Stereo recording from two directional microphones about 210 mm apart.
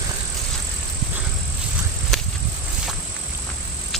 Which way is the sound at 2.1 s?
Centre (ahead or behind).